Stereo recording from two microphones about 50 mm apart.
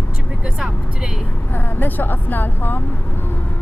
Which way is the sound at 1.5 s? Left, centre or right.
Left.